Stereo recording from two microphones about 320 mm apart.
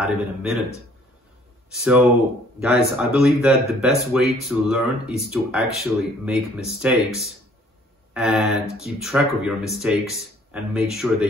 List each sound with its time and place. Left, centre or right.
0.0 s speech: centre
2.6 s speech: centre
8.1 s speech: centre